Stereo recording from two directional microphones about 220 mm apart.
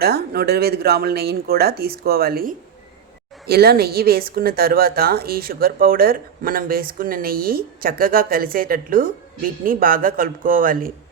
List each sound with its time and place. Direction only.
0.0 s speech: 45° right (ahead or behind)